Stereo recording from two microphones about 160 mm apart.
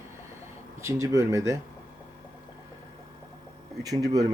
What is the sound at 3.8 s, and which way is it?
Speech, 20° right (ahead or behind).